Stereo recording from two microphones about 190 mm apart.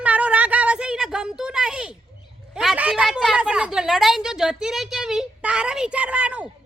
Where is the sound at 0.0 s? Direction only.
5° right (ahead or behind).